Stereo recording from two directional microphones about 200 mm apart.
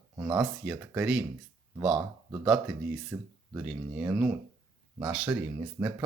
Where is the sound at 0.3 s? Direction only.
5° right (ahead or behind).